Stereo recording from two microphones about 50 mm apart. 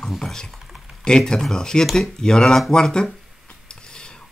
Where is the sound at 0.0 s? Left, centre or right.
Centre.